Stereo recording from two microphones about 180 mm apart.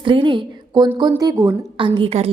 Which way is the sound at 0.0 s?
30° right (ahead or behind).